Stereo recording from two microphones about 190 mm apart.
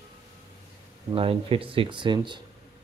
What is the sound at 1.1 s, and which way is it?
Speech, 30° right (ahead or behind).